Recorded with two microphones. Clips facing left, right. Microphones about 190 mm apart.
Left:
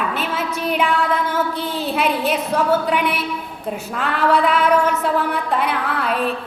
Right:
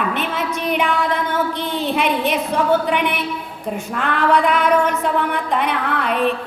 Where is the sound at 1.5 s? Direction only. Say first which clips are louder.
Right 1 dB; 5° left (ahead or behind).